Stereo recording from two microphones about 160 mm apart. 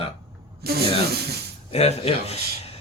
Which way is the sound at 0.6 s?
75° right (ahead or behind).